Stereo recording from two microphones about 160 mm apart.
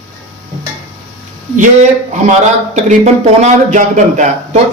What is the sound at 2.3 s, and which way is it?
Speech, 45° right (ahead or behind).